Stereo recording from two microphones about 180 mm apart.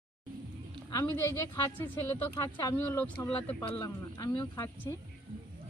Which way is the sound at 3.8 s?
20° left (ahead or behind).